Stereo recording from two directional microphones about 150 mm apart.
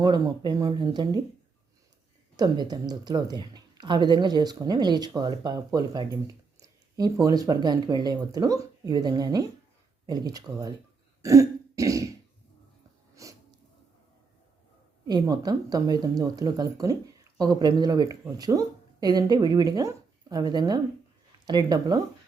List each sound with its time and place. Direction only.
0.0 s speech: 25° right (ahead or behind)
2.3 s speech: 25° right (ahead or behind)
11.2 s throat clearing: 20° right (ahead or behind)
13.2 s a sound: 20° right (ahead or behind)
15.0 s speech: 25° right (ahead or behind)